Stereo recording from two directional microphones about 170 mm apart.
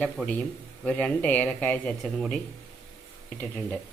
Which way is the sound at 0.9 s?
5° left (ahead or behind).